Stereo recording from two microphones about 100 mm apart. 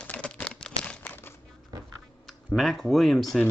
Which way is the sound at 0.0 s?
10° left (ahead or behind).